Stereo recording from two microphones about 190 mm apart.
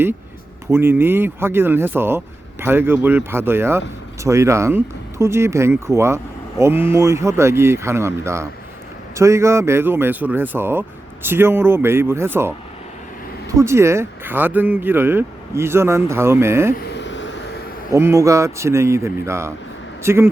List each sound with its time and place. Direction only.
0.7 s speech: 10° right (ahead or behind)
16.7 s a sound: 65° left (ahead or behind)
17.9 s speech: 15° right (ahead or behind)